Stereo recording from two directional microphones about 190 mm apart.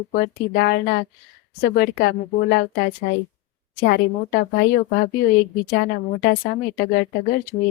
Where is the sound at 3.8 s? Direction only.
60° left (ahead or behind).